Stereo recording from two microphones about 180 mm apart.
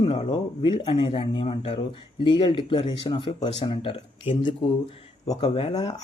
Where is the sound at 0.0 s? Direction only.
30° left (ahead or behind).